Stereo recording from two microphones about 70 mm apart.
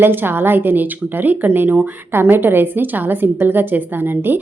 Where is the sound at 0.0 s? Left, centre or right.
Right.